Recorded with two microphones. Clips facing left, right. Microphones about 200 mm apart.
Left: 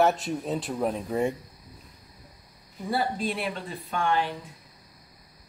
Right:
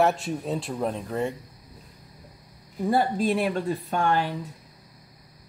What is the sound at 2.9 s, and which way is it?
A woman's voice, 45° right (ahead or behind).